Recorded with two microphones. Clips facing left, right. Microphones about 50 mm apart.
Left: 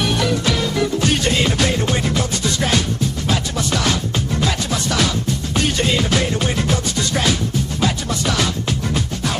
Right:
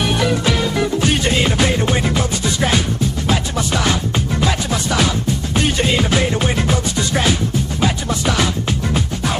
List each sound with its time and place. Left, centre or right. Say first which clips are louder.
0.0 s music: right 2 dB; centre